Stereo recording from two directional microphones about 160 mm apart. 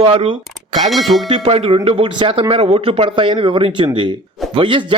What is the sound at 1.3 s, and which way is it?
Speech, 35° right (ahead or behind).